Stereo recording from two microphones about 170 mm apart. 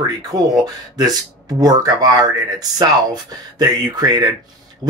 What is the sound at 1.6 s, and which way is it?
Speech, 20° right (ahead or behind).